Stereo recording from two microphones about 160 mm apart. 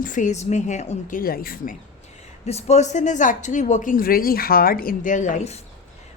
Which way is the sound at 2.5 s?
45° left (ahead or behind).